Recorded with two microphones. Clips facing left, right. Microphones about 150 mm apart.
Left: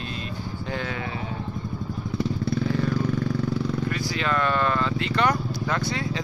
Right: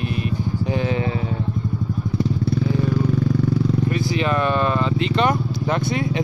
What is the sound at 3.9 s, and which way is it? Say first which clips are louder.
Vehicle: right 5 dB; 20° right (ahead or behind).